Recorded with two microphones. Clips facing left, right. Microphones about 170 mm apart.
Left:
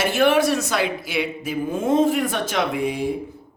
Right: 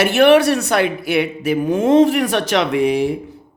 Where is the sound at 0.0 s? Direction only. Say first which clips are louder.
Right 6 dB; 70° right (ahead or behind).